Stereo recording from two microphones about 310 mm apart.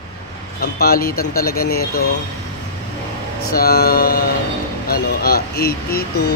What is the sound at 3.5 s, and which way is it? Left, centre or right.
Speech, left.